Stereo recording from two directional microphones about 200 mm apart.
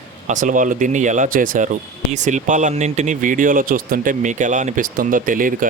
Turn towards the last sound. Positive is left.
turn(degrees=-40)  # may be behind; listen again after turning